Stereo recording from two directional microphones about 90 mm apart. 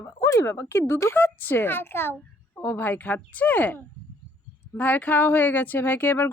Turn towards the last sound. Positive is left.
turn(degrees=25)  # may be behind; listen again after turning